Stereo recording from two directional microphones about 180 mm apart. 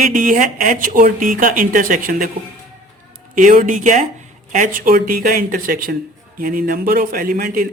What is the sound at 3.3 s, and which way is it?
Speech, 45° right (ahead or behind).